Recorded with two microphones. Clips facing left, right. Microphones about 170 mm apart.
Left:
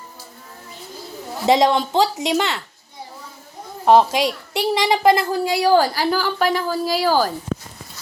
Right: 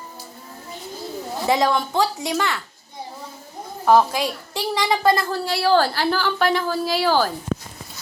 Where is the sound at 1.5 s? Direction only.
20° left (ahead or behind).